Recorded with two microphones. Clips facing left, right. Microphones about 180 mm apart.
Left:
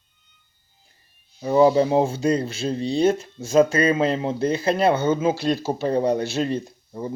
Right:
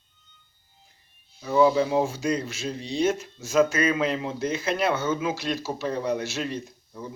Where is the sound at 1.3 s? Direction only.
35° left (ahead or behind).